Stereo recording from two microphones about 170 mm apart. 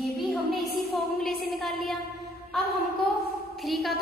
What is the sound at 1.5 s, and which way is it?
Speech, centre (ahead or behind).